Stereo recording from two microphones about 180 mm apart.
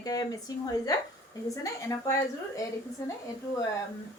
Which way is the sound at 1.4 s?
20° left (ahead or behind).